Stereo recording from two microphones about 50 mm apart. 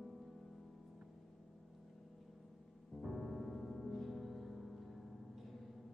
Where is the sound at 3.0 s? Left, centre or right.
Centre.